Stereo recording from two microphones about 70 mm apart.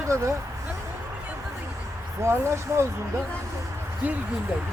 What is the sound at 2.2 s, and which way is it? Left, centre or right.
Speech, right.